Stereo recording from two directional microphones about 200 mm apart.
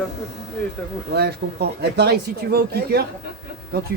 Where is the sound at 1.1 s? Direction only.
55° right (ahead or behind).